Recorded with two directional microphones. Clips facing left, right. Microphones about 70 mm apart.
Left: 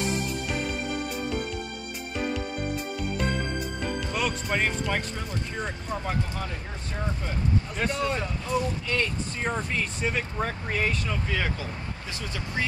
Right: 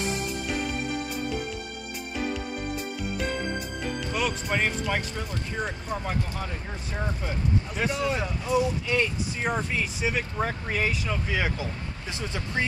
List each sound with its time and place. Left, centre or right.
4.1 s speech: centre